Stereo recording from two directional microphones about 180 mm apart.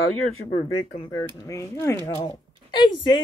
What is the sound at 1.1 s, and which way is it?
Speech, 20° left (ahead or behind).